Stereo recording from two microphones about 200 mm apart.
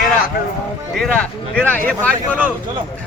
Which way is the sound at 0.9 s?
5° left (ahead or behind).